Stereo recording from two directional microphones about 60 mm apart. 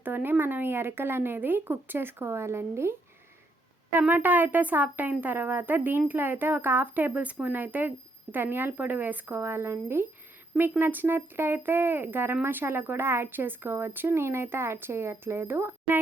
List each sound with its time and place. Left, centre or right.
0.0 s speech: right
4.1 s speech: right